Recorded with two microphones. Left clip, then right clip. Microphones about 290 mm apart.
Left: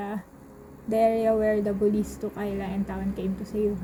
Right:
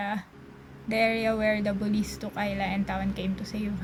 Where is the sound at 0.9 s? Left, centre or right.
Right.